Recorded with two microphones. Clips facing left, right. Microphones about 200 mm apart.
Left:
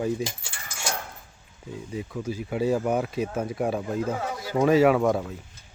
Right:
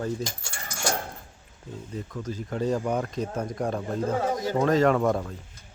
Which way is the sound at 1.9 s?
10° left (ahead or behind).